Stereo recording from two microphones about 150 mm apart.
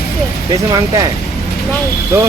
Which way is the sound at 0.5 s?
25° right (ahead or behind).